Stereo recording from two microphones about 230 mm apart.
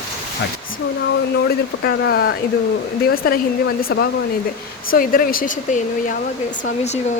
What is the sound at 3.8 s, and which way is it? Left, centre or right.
Speech, left.